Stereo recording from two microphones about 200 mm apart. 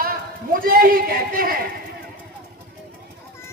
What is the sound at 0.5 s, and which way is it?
A man's voice, 45° right (ahead or behind).